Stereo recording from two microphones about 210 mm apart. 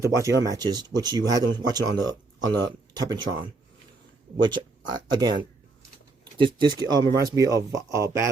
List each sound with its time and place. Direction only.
0.0 s speech: 15° right (ahead or behind)
4.4 s speech: 20° right (ahead or behind)